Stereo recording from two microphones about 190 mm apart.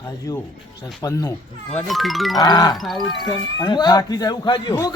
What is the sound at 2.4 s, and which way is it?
Speech, 20° left (ahead or behind).